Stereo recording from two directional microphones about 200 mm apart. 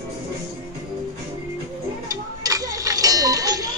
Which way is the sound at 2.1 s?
15° right (ahead or behind).